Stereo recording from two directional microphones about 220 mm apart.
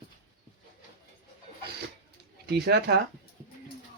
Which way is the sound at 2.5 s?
50° right (ahead or behind).